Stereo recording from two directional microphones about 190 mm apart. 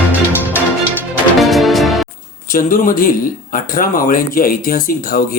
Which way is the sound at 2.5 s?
45° left (ahead or behind).